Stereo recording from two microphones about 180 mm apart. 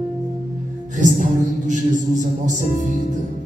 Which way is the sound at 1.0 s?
45° right (ahead or behind).